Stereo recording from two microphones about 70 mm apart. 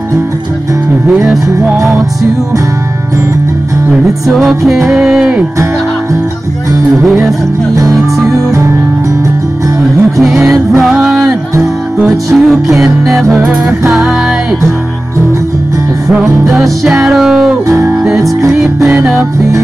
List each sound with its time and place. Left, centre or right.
1.0 s music: centre
3.9 s music: centre
6.9 s music: centre
7.7 s music: right
10.0 s music: centre
16.4 s music: centre
17.6 s music: right
18.0 s music: centre